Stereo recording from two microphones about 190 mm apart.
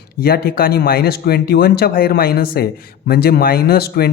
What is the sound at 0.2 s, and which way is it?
Speech, 55° left (ahead or behind).